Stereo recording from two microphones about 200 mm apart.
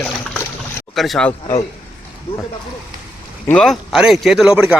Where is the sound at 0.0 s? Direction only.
10° left (ahead or behind).